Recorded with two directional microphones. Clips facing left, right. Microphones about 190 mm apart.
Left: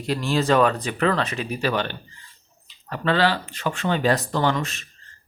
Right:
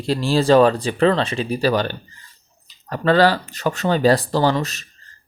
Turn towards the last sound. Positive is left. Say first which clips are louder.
# right 4 dB
turn(degrees=-40)  # may be behind; listen again after turning